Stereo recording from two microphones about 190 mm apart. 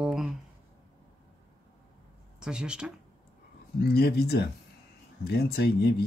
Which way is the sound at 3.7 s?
55° left (ahead or behind).